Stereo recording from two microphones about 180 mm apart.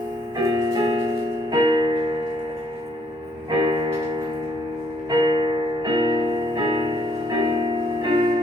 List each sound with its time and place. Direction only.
0.4 s music: 20° right (ahead or behind)
3.5 s piano: 25° right (ahead or behind)
5.0 s music: 25° right (ahead or behind)